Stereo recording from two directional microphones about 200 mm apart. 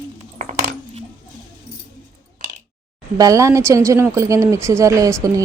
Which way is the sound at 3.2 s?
15° right (ahead or behind).